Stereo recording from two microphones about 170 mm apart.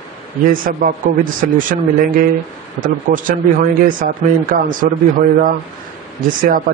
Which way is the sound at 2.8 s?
50° right (ahead or behind).